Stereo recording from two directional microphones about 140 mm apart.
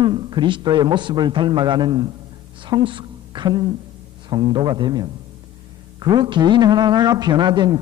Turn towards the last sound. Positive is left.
turn(degrees=-30)  # may be behind; listen again after turning